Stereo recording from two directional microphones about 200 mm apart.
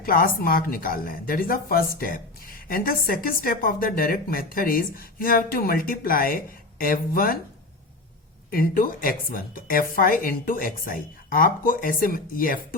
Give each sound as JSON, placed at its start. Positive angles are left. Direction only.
{"t": 0.0, "sound": "a woman's voice", "side_deg": 45}
{"t": 8.4, "sound": "a woman's voice", "side_deg": 45}